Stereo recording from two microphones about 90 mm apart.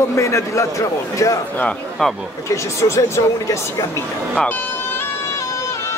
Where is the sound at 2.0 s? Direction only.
5° left (ahead or behind).